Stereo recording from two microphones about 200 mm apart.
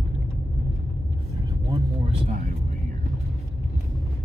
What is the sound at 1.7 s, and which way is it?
Vehicle, 30° right (ahead or behind).